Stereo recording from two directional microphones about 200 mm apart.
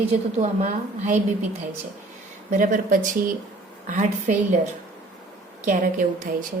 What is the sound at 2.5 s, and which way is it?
Speech, 40° right (ahead or behind).